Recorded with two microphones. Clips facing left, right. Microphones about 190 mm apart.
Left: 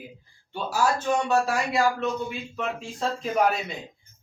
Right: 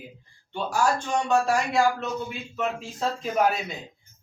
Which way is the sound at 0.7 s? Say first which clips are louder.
Left 1 dB; 5° left (ahead or behind).